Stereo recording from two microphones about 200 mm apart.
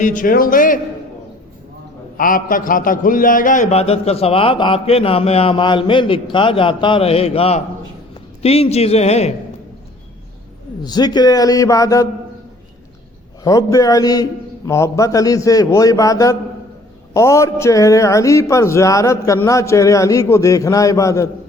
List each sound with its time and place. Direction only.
0.0 s a man's voice: 40° left (ahead or behind)
2.1 s a man's voice: 45° left (ahead or behind)
10.8 s a man's voice: 20° left (ahead or behind)
13.4 s a man's voice: 15° left (ahead or behind)